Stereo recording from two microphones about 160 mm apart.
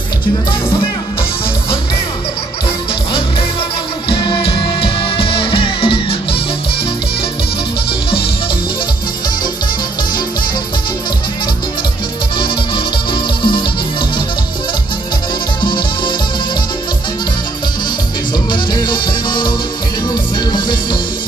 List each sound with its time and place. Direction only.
0.5 s speech: 35° left (ahead or behind)
4.1 s music: 30° left (ahead or behind)
12.4 s music: 30° left (ahead or behind)
15.6 s music: 30° left (ahead or behind)
18.5 s music: 30° left (ahead or behind)